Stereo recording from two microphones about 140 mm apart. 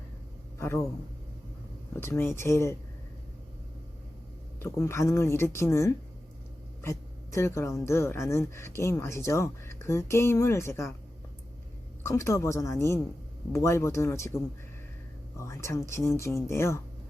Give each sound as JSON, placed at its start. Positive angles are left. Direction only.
{"t": 0.6, "sound": "speech", "side_deg": 20}
{"t": 2.0, "sound": "speech", "side_deg": 15}
{"t": 4.6, "sound": "speech", "side_deg": 20}
{"t": 12.0, "sound": "speech", "side_deg": 20}